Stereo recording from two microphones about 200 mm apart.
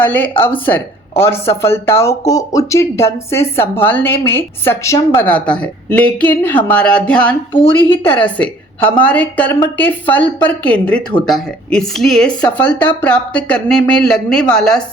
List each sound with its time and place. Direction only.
0.0 s speech: 10° left (ahead or behind)